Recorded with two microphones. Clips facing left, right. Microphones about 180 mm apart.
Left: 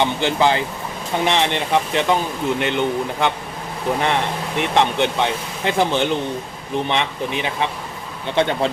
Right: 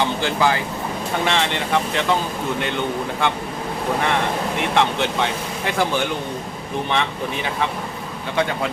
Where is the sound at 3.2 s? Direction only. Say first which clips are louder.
Left 1 dB; 20° left (ahead or behind).